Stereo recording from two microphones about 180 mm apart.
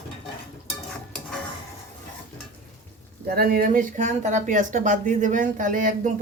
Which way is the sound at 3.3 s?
55° right (ahead or behind).